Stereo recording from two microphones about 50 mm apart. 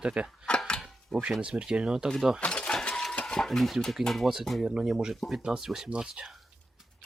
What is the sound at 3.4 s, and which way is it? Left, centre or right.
Speech, centre.